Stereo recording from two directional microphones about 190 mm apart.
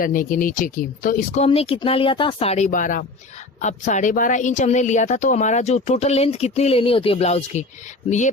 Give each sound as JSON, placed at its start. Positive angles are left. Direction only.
{"t": 0.0, "sound": "speech", "side_deg": 45}
{"t": 1.5, "sound": "a woman's voice", "side_deg": 30}